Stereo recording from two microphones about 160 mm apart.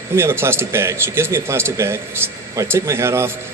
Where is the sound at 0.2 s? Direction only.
15° right (ahead or behind).